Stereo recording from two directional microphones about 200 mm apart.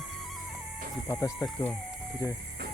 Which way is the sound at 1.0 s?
15° left (ahead or behind).